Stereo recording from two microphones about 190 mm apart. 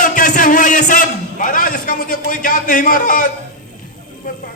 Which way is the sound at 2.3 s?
45° left (ahead or behind).